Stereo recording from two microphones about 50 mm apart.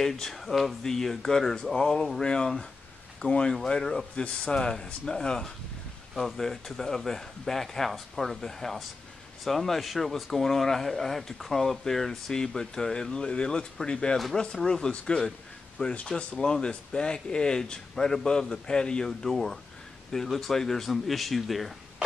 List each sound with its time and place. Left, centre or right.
0.0 s speech: centre
14.4 s speech: centre
15.8 s speech: left
16.3 s speech: centre